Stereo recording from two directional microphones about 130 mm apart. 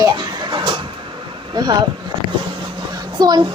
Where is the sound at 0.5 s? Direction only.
40° right (ahead or behind).